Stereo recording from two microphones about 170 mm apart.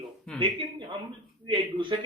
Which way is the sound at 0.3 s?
30° right (ahead or behind).